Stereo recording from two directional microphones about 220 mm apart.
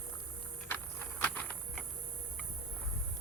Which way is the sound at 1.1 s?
5° left (ahead or behind).